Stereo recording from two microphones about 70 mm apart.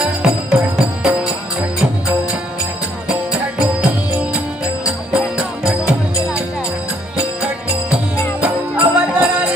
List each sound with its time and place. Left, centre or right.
0.0 s music: centre
3.3 s music: centre
8.4 s music: centre